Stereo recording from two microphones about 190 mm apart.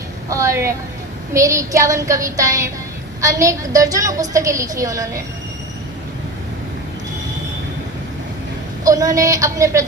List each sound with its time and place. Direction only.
0.3 s a woman's voice: 15° right (ahead or behind)
8.8 s a woman's voice: 20° right (ahead or behind)